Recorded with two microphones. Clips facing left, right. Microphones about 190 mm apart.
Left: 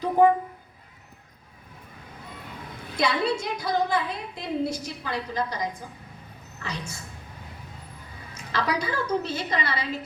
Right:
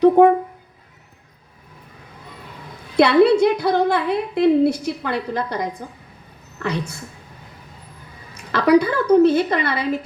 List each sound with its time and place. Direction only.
0.0 s a sound: 65° right (ahead or behind)
3.0 s a woman's voice: 65° right (ahead or behind)
8.5 s a woman's voice: 60° right (ahead or behind)